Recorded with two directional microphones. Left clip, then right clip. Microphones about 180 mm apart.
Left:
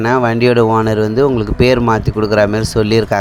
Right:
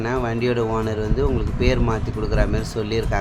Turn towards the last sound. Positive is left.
turn(degrees=45)  # may be behind; listen again after turning